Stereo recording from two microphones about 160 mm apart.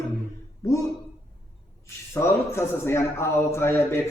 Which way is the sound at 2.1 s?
15° left (ahead or behind).